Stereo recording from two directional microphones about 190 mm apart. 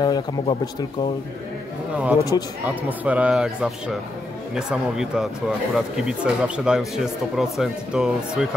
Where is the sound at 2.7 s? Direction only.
10° right (ahead or behind).